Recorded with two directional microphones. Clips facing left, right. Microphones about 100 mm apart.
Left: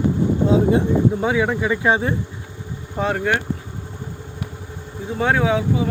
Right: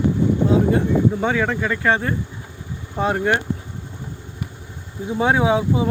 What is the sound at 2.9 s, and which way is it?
Speech, 5° right (ahead or behind).